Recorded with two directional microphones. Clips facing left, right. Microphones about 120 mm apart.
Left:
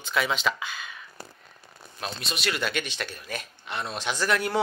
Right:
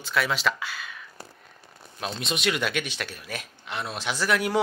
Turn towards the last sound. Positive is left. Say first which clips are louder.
# right 1 dB
turn(degrees=-10)  # may be behind; listen again after turning